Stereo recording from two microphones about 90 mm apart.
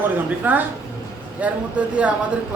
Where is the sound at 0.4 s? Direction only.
20° right (ahead or behind).